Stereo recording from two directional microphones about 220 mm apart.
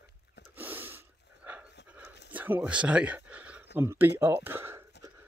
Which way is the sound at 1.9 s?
5° right (ahead or behind).